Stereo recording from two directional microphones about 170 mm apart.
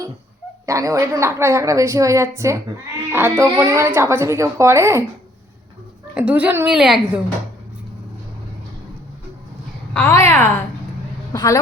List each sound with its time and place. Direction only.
0.6 s a woman's voice: 20° right (ahead or behind)
6.1 s a woman's voice: 10° right (ahead or behind)
9.9 s a child's voice: 15° left (ahead or behind)